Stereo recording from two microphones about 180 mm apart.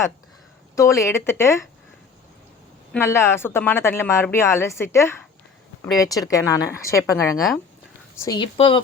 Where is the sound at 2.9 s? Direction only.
15° left (ahead or behind).